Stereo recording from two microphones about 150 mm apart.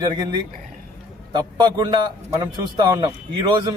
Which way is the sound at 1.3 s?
25° right (ahead or behind).